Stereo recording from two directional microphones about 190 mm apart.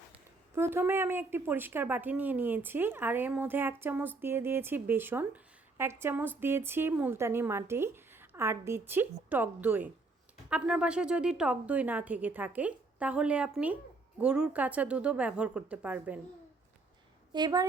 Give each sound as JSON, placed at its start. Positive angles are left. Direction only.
{"t": 0.5, "sound": "a woman's voice", "side_deg": -10}
{"t": 17.3, "sound": "a woman's voice", "side_deg": -20}